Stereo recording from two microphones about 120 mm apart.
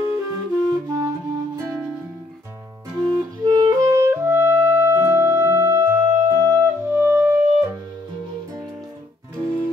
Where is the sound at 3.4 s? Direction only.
30° right (ahead or behind).